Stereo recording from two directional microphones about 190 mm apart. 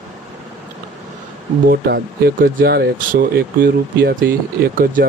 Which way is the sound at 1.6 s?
55° right (ahead or behind).